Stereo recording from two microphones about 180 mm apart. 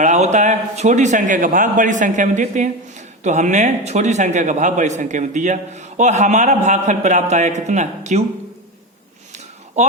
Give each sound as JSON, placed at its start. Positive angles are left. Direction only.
{"t": 0.0, "sound": "a man's voice", "side_deg": -40}